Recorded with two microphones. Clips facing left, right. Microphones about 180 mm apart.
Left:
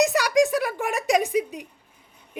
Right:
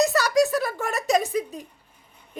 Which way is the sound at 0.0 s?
15° left (ahead or behind).